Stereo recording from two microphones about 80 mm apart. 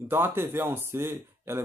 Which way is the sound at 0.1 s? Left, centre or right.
Right.